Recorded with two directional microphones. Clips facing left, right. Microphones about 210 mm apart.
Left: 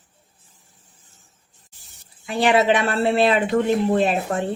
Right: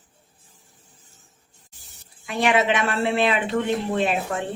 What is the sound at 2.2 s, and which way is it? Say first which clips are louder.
A woman's voice: left 3 dB; 35° left (ahead or behind).